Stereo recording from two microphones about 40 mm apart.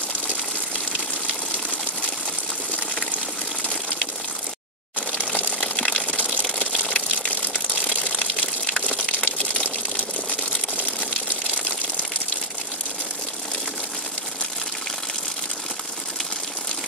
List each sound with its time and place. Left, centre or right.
0.9 s water: left
6.8 s water: left
8.6 s water: centre; by 10.0 s left